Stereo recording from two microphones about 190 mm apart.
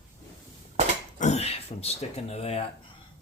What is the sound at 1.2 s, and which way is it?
Speech, 35° left (ahead or behind).